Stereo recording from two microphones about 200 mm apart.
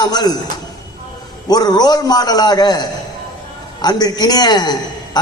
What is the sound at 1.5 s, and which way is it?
Speech, 20° left (ahead or behind).